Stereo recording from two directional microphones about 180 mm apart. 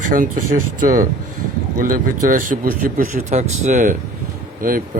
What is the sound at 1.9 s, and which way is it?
Speech, 50° right (ahead or behind).